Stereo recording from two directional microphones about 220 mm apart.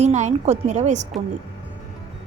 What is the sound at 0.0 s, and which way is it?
A woman's voice, 30° right (ahead or behind).